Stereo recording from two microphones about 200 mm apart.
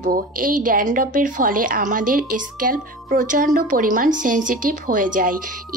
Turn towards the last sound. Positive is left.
turn(degrees=-45)  # may be behind; listen again after turning